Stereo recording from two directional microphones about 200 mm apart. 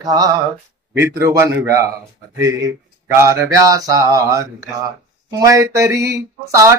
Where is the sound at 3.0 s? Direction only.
15° right (ahead or behind).